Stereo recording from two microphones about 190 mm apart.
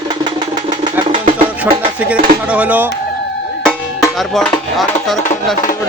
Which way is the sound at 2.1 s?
5° right (ahead or behind).